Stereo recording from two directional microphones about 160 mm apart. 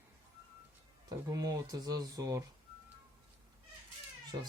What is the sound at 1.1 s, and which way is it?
Speech, 20° right (ahead or behind).